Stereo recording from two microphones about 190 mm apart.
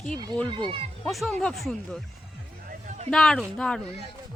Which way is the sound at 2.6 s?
40° right (ahead or behind).